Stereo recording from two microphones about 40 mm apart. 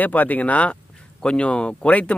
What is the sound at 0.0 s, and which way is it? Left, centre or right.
Speech, left.